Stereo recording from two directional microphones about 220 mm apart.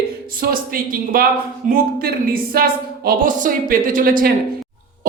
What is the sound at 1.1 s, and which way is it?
Speech, 40° right (ahead or behind).